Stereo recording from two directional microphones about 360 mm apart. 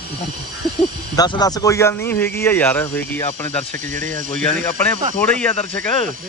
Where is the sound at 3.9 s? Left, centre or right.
Right.